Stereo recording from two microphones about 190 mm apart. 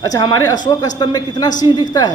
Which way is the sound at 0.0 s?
20° left (ahead or behind).